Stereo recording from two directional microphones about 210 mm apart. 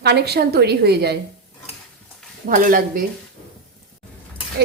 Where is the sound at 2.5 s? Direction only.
40° right (ahead or behind).